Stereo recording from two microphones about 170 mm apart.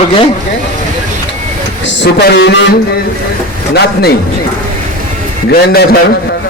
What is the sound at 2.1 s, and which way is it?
Speech, 90° left.